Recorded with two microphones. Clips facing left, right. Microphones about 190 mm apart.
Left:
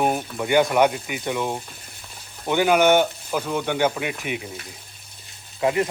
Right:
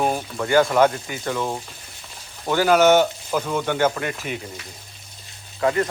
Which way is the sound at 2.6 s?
10° left (ahead or behind).